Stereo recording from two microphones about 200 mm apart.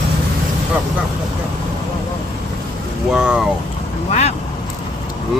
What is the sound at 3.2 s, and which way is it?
Speech, 5° right (ahead or behind).